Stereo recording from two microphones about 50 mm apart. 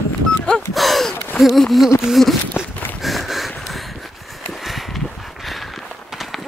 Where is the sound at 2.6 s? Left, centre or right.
Left.